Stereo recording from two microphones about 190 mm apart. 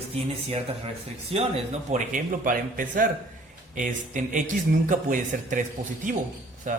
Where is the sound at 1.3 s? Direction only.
35° right (ahead or behind).